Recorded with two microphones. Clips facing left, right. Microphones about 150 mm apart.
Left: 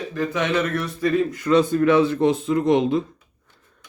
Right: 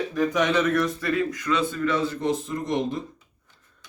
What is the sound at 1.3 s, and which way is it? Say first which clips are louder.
Speech: left 8 dB; 30° left (ahead or behind).